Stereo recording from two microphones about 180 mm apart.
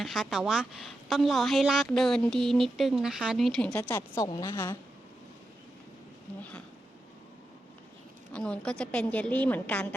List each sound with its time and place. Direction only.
0.0 s a woman's voice: centre (ahead or behind)
3.7 s a woman's voice: 15° left (ahead or behind)
4.3 s a woman's voice: 25° left (ahead or behind)
4.5 s a woman's voice: 15° left (ahead or behind)
8.3 s a woman's voice: 5° left (ahead or behind)